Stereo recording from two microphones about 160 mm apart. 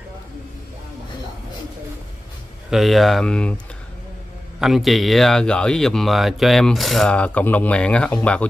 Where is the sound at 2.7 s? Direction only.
Centre (ahead or behind).